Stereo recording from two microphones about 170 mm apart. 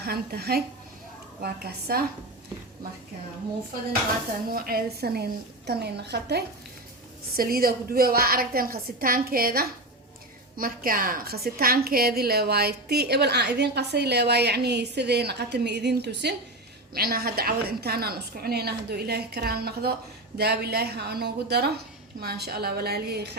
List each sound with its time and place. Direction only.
0.0 s a woman's voice: 70° right (ahead or behind)
4.4 s a woman's voice: 60° right (ahead or behind); by 6.4 s 75° right (ahead or behind)
7.3 s a woman's voice: 60° right (ahead or behind); by 16.3 s 80° right
16.9 s a woman's voice: 60° right (ahead or behind)